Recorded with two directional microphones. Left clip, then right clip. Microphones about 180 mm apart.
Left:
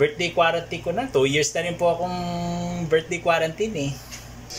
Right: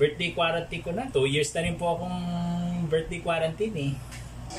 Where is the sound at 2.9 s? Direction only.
15° right (ahead or behind).